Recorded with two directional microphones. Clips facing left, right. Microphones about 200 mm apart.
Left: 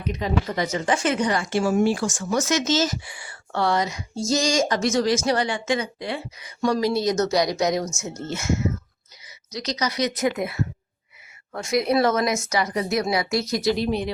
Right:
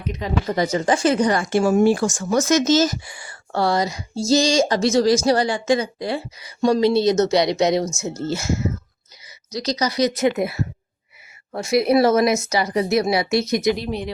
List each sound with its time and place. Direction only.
0.4 s speech: 35° right (ahead or behind)
6.6 s speech: 25° right (ahead or behind)